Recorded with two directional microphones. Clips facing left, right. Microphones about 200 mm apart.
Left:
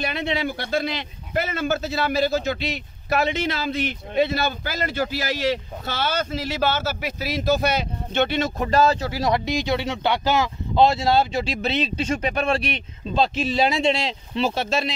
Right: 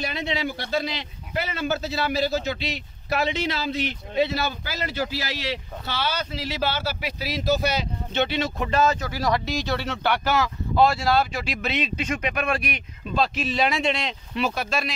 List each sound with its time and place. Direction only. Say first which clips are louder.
0.0 s a man's voice: left 2 dB; 55° left (ahead or behind); by 15.0 s 25° left (ahead or behind)